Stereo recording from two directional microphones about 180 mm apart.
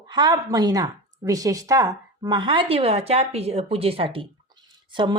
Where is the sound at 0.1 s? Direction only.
25° right (ahead or behind).